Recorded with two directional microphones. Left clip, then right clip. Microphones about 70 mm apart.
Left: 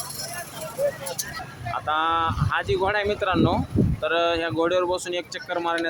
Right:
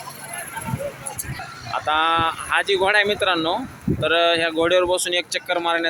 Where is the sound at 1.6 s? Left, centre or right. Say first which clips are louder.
Right 4 dB; right.